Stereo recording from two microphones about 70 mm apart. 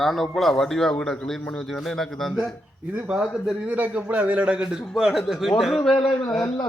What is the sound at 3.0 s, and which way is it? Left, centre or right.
Speech, centre.